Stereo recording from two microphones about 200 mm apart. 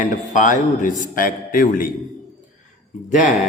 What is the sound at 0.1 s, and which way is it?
A man's voice, 40° left (ahead or behind).